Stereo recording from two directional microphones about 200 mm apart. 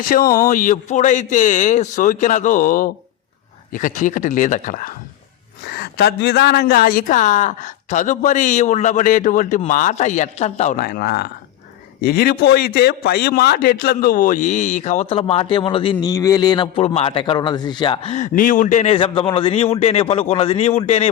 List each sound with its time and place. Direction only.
0.3 s speech: 15° left (ahead or behind)
0.5 s a man's voice: 40° left (ahead or behind)
5.6 s a man's voice: 50° left (ahead or behind); by 21.1 s 30° left (ahead or behind)